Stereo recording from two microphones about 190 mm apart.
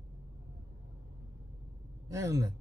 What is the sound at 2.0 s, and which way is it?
Speech, 15° right (ahead or behind).